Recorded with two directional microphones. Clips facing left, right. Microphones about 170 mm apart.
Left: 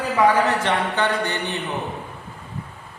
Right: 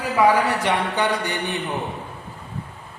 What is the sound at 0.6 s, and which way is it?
Speech, 10° right (ahead or behind).